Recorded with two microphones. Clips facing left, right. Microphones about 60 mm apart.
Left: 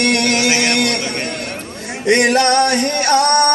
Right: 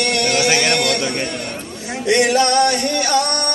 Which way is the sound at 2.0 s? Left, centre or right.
Left.